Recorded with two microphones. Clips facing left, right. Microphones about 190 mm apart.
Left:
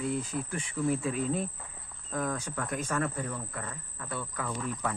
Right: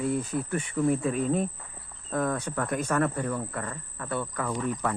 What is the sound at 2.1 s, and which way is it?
Speech, 60° right (ahead or behind).